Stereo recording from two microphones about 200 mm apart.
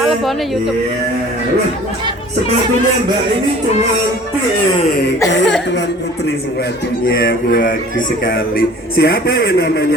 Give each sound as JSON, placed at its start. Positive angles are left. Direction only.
{"t": 0.0, "sound": "speech", "side_deg": 0}
{"t": 7.2, "sound": "speech", "side_deg": 50}